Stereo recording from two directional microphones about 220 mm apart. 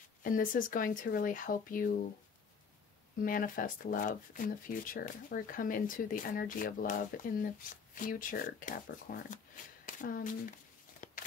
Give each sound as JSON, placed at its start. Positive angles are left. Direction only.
{"t": 0.2, "sound": "speech", "side_deg": 40}
{"t": 3.2, "sound": "speech", "side_deg": 40}
{"t": 11.0, "sound": "a sound", "side_deg": 35}